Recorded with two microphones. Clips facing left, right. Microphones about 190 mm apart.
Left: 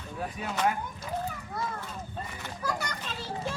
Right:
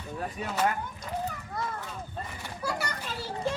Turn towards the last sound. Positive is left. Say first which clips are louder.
# right 3 dB
turn(degrees=-10)  # may be behind; listen again after turning